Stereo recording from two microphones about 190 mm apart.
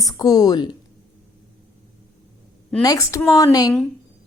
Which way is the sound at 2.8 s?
15° left (ahead or behind).